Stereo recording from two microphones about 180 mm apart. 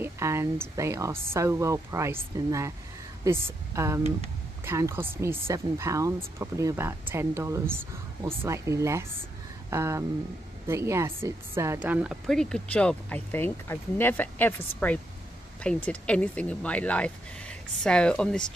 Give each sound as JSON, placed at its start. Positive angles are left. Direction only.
{"t": 0.0, "sound": "speech", "side_deg": -15}